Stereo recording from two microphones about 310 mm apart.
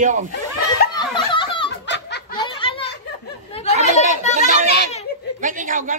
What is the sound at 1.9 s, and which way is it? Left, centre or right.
Snicker, left.